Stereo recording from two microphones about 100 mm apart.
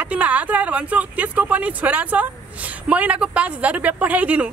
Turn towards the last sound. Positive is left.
turn(degrees=-15)  # may be behind; listen again after turning